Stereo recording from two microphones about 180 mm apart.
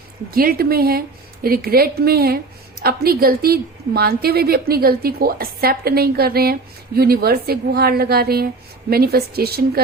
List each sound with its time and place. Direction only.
0.3 s a woman's voice: 55° right (ahead or behind)